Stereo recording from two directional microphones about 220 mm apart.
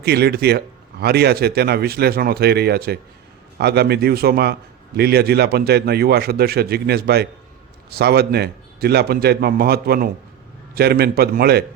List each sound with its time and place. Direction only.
0.0 s speech: 45° right (ahead or behind)